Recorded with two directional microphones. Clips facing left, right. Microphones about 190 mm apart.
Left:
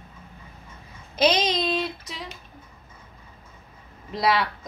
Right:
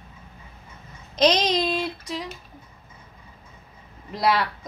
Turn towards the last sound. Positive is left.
turn(degrees=0)  # may be behind; listen again after turning